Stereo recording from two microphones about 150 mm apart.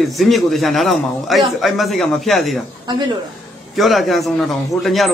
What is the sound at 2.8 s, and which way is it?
Speech, 30° right (ahead or behind).